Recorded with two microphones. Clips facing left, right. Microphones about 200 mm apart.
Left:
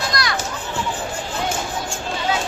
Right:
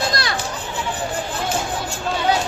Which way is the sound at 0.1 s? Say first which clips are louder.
Even; 30° right (ahead or behind).